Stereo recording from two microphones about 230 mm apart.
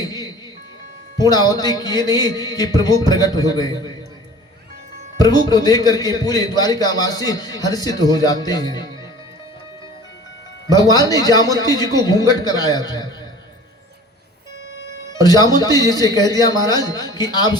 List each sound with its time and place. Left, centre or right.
0.0 s music: centre
1.2 s a man's voice: centre
5.2 s a man's voice: centre
10.7 s a man's voice: centre
15.1 s a man's voice: centre